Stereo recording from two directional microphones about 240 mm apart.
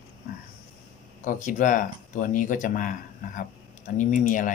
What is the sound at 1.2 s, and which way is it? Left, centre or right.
Speech, left.